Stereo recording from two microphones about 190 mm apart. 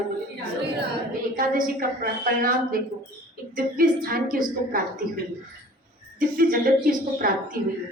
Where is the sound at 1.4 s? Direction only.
50° right (ahead or behind).